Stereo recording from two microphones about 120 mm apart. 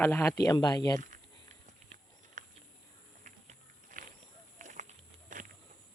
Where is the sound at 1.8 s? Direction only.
75° right (ahead or behind).